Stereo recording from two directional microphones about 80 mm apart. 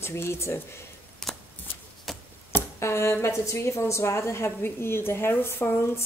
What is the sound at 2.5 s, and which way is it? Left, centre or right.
A woman's voice, left.